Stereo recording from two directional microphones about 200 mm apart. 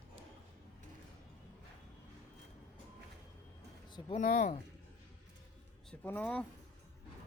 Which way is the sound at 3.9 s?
25° left (ahead or behind).